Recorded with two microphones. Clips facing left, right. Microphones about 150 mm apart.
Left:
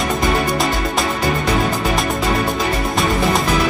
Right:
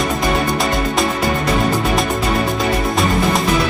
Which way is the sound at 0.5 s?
Centre (ahead or behind).